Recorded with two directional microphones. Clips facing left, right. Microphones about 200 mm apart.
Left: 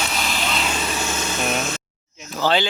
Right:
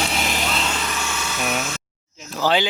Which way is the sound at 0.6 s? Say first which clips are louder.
Left 1 dB; 20° left (ahead or behind).